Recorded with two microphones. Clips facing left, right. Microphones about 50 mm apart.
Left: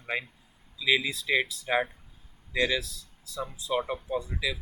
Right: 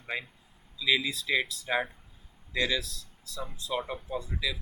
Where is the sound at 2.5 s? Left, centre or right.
Centre.